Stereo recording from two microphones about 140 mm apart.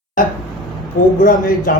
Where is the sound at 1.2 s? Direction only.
80° left.